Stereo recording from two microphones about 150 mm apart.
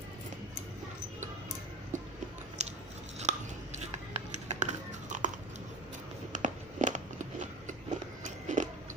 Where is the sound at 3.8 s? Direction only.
50° right (ahead or behind).